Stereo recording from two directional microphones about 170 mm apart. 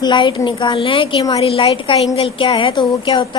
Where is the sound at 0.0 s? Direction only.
25° left (ahead or behind).